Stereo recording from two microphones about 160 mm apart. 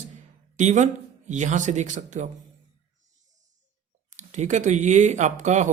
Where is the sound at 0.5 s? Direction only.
50° right (ahead or behind).